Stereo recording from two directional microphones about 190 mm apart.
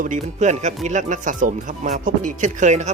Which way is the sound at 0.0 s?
40° right (ahead or behind).